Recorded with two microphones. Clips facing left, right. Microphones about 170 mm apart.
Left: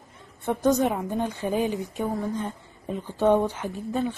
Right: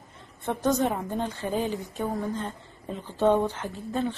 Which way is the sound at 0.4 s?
10° left (ahead or behind).